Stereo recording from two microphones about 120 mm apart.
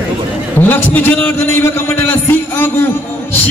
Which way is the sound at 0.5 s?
15° left (ahead or behind).